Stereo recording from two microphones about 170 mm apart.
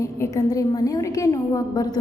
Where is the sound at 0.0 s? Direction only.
20° left (ahead or behind).